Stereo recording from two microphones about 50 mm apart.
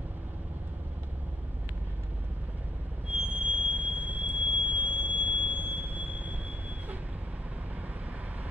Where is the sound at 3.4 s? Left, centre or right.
Right.